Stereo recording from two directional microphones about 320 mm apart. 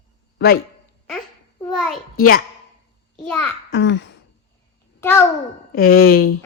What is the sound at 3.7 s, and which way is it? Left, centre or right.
Throat clearing, left.